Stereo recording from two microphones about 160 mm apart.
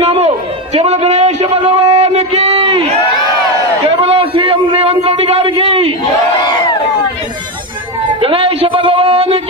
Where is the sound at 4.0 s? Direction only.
35° right (ahead or behind).